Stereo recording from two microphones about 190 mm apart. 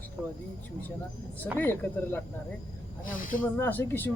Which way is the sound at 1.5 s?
10° left (ahead or behind).